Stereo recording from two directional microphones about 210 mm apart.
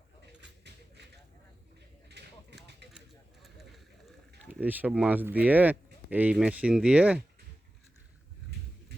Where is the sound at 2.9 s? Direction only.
Centre (ahead or behind).